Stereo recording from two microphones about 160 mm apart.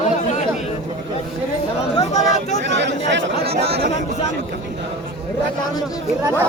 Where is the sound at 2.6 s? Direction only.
90° right.